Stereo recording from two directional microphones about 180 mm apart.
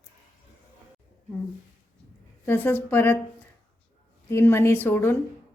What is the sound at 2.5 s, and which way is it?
Speech, 10° left (ahead or behind).